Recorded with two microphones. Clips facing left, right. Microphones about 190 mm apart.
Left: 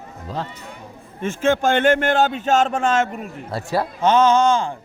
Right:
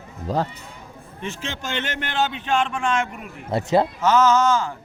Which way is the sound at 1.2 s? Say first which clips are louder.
Left 12 dB; 50° left (ahead or behind).